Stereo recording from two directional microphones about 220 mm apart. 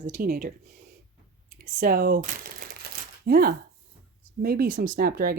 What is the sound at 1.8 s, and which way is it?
Crumpling, 40° right (ahead or behind).